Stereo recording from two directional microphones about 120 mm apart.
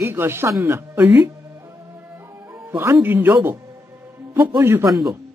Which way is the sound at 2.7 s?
20° right (ahead or behind).